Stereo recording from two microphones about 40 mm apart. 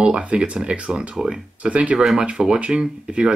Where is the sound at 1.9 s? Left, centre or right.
Centre.